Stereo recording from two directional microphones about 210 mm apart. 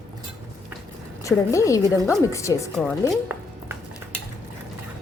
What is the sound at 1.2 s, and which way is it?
A woman's voice, 15° left (ahead or behind).